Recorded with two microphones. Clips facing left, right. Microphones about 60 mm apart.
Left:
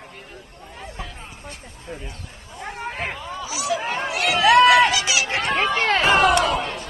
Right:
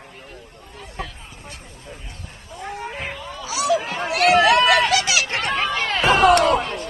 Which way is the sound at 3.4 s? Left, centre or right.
Right.